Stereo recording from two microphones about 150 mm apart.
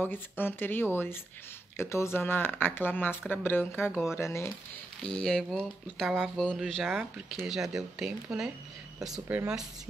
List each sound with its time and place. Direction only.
0.0 s speech: 15° left (ahead or behind)
5.0 s speech: 5° left (ahead or behind)